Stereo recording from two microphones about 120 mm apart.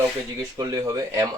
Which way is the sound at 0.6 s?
30° right (ahead or behind).